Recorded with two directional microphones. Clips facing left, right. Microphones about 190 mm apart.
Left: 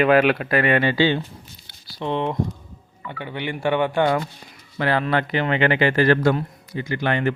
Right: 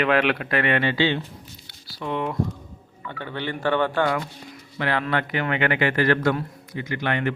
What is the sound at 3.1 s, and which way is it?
Speech, 15° left (ahead or behind).